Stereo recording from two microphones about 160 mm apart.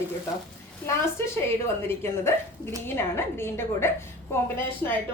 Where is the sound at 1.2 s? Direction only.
15° left (ahead or behind).